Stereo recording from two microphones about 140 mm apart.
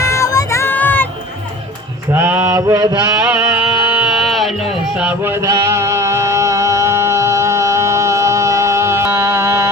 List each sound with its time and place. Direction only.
0.0 s music: 20° left (ahead or behind)
2.1 s mantra: 15° right (ahead or behind)
3.2 s music: 15° right (ahead or behind)
4.9 s music: 10° right (ahead or behind)